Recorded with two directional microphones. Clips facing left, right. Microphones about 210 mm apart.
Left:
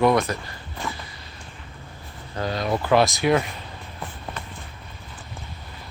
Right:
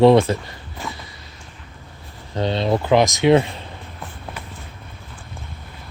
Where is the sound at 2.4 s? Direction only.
25° right (ahead or behind).